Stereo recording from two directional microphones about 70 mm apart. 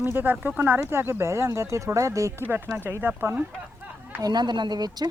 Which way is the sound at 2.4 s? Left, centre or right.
Right.